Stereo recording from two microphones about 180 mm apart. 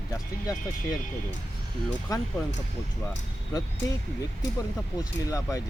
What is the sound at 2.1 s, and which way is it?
Speech, 20° left (ahead or behind).